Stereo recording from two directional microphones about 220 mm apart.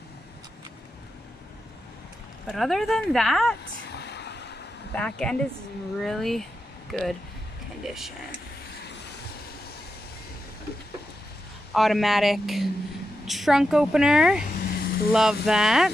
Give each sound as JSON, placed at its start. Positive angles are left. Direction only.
{"t": 2.4, "sound": "speech", "side_deg": 0}
{"t": 3.9, "sound": "vehicle", "side_deg": 50}
{"t": 4.9, "sound": "speech", "side_deg": 5}
{"t": 8.8, "sound": "vehicle", "side_deg": 50}
{"t": 11.7, "sound": "speech", "side_deg": 0}
{"t": 14.7, "sound": "a sound", "side_deg": 45}
{"t": 15.0, "sound": "speech", "side_deg": -5}